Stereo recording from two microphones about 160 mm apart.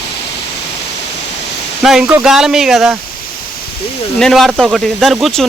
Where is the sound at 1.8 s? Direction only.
Centre (ahead or behind).